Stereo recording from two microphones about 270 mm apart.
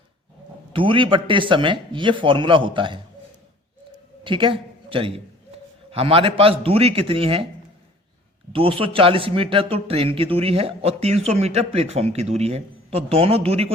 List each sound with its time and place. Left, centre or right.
0.7 s speech: centre
4.2 s a man's voice: centre
8.5 s a man's voice: centre